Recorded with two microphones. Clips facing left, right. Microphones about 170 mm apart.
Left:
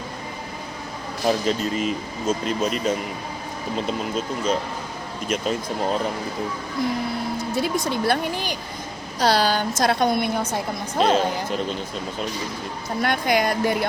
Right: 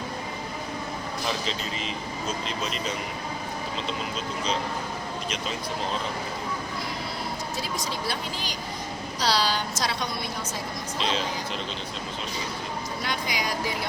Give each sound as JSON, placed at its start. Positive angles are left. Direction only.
{"t": 1.3, "sound": "a woman's voice", "side_deg": 50}
{"t": 7.5, "sound": "a woman's voice", "side_deg": 60}
{"t": 13.0, "sound": "a woman's voice", "side_deg": 55}